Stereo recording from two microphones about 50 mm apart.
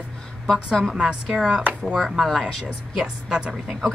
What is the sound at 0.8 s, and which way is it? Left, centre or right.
A woman's voice, centre.